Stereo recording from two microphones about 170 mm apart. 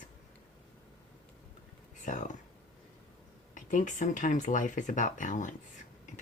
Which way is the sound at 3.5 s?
50° left (ahead or behind).